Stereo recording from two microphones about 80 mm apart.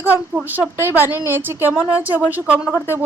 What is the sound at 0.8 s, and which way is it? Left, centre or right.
A woman's voice, right.